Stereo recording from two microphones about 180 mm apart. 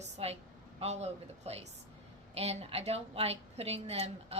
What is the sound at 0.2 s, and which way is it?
A woman's voice, 35° right (ahead or behind).